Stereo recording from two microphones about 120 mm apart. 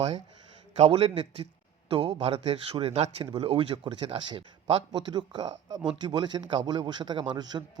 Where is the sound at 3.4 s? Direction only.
50° right (ahead or behind).